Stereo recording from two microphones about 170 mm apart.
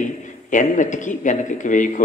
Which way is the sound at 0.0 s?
50° left (ahead or behind).